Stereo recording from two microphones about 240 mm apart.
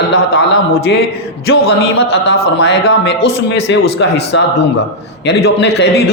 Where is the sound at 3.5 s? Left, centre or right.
Left.